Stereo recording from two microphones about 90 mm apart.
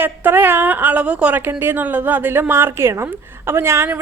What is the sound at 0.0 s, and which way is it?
Speech, 25° right (ahead or behind).